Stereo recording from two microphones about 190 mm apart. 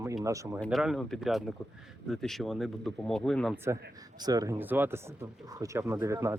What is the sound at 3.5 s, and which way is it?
Speech, 15° right (ahead or behind).